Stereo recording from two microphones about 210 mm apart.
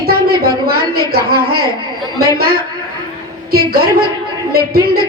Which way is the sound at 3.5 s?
45° right (ahead or behind).